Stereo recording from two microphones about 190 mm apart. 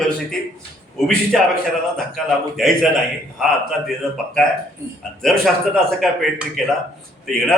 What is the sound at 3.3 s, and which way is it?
Speech, centre (ahead or behind).